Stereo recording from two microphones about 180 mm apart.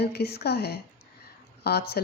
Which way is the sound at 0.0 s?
60° left (ahead or behind).